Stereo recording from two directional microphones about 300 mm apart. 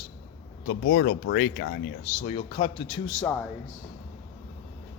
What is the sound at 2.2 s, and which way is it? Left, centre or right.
Speech, centre.